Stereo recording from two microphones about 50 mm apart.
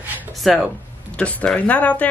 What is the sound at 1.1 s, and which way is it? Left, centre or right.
Speech, left.